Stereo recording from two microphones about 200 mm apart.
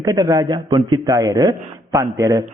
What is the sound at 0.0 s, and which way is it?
Speech, 15° right (ahead or behind).